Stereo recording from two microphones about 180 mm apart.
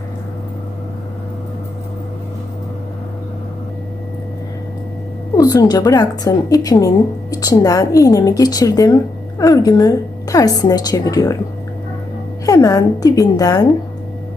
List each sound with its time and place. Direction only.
5.4 s a woman's voice: 20° left (ahead or behind)
12.5 s a woman's voice: 20° left (ahead or behind)